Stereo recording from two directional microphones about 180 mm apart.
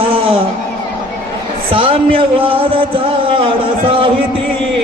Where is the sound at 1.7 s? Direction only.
30° right (ahead or behind).